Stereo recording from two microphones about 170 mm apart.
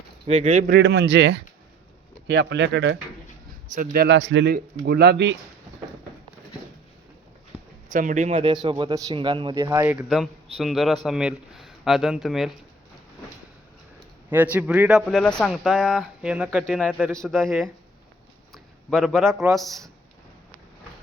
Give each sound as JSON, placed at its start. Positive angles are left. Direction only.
{"t": 0.3, "sound": "speech", "side_deg": -40}
{"t": 0.7, "sound": "speech", "side_deg": -85}
{"t": 3.7, "sound": "speech", "side_deg": -60}
{"t": 7.9, "sound": "speech", "side_deg": -50}
{"t": 8.3, "sound": "a man's voice", "side_deg": -30}
{"t": 9.6, "sound": "speech", "side_deg": -15}
{"t": 10.6, "sound": "speech", "side_deg": 0}
{"t": 14.3, "sound": "speech", "side_deg": -10}
{"t": 18.5, "sound": "a sound", "side_deg": 0}
{"t": 19.5, "sound": "speech", "side_deg": 0}